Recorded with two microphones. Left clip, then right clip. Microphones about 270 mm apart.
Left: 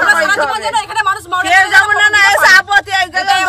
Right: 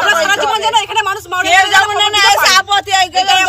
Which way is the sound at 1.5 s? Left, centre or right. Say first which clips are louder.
Left 1 dB; centre.